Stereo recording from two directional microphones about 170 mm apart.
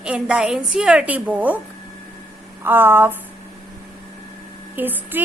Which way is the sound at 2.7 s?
10° right (ahead or behind).